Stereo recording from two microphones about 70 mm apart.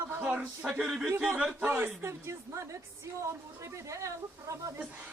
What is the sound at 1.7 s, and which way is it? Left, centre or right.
Speech, right.